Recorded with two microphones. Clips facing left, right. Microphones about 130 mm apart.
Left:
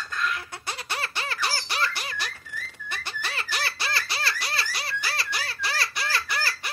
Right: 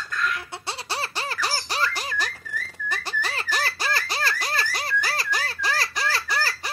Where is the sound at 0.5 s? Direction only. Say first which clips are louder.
Right 2 dB; 30° right (ahead or behind).